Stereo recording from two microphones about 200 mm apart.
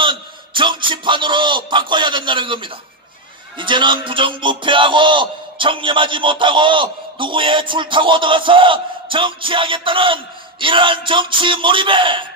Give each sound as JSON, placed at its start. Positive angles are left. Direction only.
{"t": 0.0, "sound": "a man's voice", "side_deg": -25}
{"t": 3.5, "sound": "music", "side_deg": -25}